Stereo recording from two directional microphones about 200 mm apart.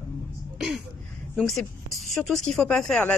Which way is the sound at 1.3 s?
Centre (ahead or behind).